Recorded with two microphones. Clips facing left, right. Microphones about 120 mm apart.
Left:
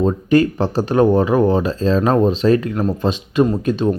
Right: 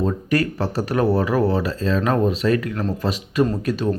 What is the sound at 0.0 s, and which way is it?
Speech, 25° left (ahead or behind).